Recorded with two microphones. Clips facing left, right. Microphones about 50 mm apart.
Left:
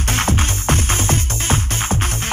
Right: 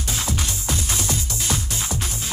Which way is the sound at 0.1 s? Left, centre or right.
Left.